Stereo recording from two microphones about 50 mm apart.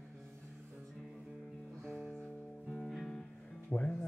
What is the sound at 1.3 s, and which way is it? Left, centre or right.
Music, centre.